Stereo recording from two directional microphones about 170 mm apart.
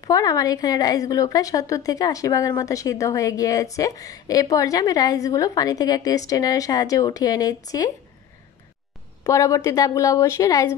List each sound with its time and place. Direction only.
0.0 s a woman's voice: 20° left (ahead or behind)
9.2 s a woman's voice: 20° left (ahead or behind)